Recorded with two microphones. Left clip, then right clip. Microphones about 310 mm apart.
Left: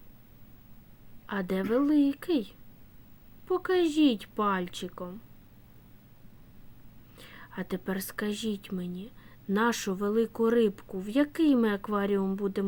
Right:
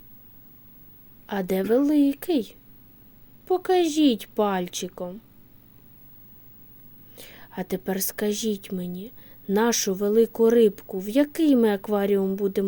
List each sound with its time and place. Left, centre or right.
1.3 s a woman's voice: centre
7.2 s a woman's voice: centre